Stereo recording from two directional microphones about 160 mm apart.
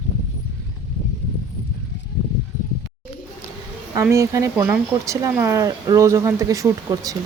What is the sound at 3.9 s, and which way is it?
Speech, 20° right (ahead or behind).